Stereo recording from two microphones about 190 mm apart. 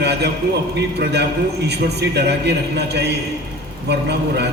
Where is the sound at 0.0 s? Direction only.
60° right (ahead or behind).